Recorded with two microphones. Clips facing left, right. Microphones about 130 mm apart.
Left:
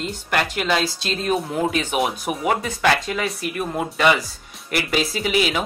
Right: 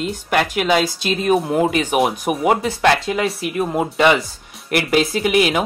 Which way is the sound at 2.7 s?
30° right (ahead or behind).